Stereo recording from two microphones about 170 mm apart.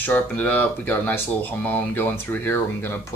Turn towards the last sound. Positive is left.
turn(degrees=15)  # may be behind; listen again after turning